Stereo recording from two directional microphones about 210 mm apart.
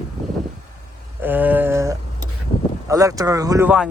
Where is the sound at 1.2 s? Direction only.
10° right (ahead or behind).